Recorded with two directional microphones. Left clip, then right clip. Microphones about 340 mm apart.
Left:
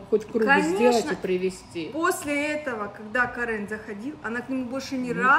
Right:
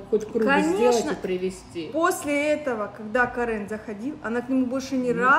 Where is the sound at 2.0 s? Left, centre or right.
Centre.